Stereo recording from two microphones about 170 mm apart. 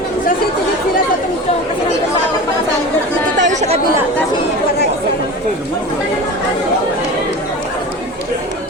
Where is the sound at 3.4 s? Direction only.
45° right (ahead or behind).